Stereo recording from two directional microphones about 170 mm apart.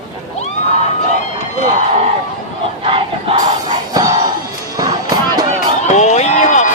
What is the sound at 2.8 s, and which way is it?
Crowd, 30° right (ahead or behind).